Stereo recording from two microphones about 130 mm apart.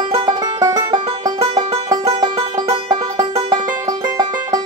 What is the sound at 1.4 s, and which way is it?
Music, 40° right (ahead or behind).